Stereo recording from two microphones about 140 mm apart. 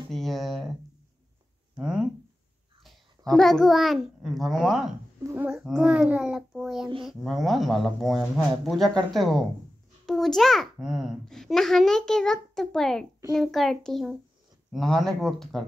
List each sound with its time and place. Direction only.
0.1 s a child's voice: centre (ahead or behind)
1.8 s a child's voice: 5° right (ahead or behind)
5.2 s a child's voice: 15° right (ahead or behind)
5.5 s a child's voice: 5° right (ahead or behind)